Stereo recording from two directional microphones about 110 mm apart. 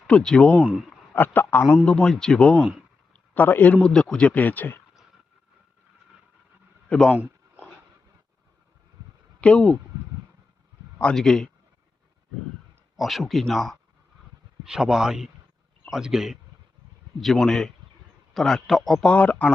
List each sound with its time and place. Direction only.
0.1 s a man's voice: 5° left (ahead or behind)
0.5 s speech: 10° right (ahead or behind)
1.1 s a man's voice: 15° left (ahead or behind)
1.8 s a man's voice: 5° left (ahead or behind)
3.1 s a sound: 15° left (ahead or behind)
3.8 s a man's voice: 5° left (ahead or behind)
6.8 s speech: 10° left (ahead or behind)
7.1 s a sound: 15° right (ahead or behind)
9.4 s a man's voice: 10° left (ahead or behind)
10.9 s speech: 10° left (ahead or behind)
13.0 s a man's voice: centre (ahead or behind)